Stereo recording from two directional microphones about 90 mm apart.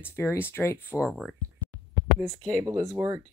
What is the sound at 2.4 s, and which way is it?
Speech, 10° left (ahead or behind).